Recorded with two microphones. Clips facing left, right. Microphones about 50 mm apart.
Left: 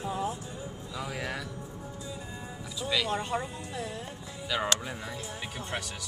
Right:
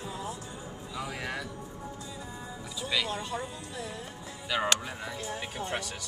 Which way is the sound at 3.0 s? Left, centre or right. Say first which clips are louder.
Left 3 dB; left.